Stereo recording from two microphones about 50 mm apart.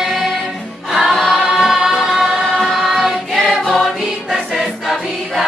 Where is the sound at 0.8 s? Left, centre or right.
Centre.